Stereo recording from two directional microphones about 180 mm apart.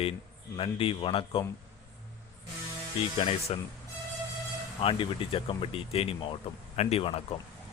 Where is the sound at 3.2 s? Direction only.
35° left (ahead or behind).